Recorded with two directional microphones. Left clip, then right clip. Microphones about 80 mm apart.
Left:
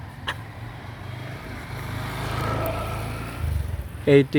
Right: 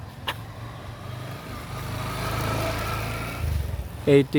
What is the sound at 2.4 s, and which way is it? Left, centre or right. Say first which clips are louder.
Vehicle: left 2 dB; left.